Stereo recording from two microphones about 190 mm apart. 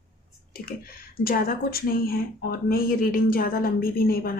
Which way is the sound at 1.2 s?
50° left (ahead or behind).